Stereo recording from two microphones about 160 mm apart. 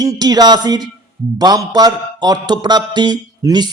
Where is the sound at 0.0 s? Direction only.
25° right (ahead or behind).